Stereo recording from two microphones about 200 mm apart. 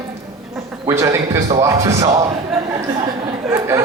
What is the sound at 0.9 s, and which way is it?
A man's voice, 15° right (ahead or behind).